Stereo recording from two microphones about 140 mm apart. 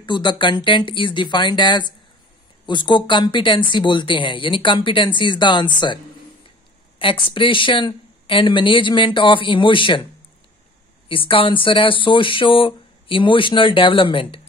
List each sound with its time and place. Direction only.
0.0 s speech: 35° left (ahead or behind)
7.0 s speech: 40° left (ahead or behind)
11.1 s speech: 40° left (ahead or behind)